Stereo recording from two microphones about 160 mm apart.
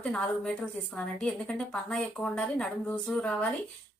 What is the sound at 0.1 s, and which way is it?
A woman's voice, 5° left (ahead or behind).